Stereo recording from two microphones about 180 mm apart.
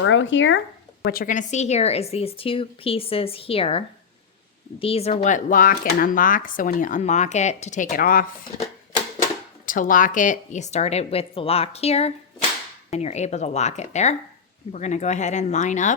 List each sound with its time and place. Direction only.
0.1 s speech: 90° left
1.0 s a woman's voice: 55° left (ahead or behind)
9.6 s a woman's voice: 50° left (ahead or behind)